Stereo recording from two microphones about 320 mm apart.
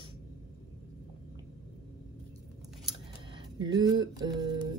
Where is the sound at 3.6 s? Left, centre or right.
Centre.